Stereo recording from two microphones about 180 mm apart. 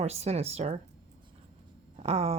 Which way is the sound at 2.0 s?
35° right (ahead or behind).